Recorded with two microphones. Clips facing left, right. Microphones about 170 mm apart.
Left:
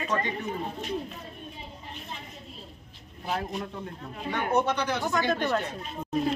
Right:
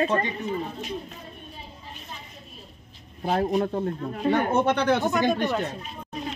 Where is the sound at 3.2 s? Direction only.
45° right (ahead or behind).